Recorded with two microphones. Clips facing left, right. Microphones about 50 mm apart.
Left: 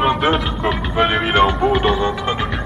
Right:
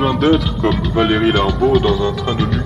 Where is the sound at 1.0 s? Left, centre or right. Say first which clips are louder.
Right 7 dB; centre.